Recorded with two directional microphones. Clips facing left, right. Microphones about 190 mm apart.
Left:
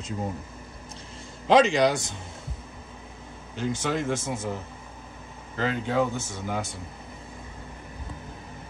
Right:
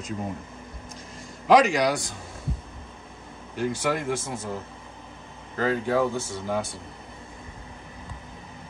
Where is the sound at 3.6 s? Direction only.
20° left (ahead or behind).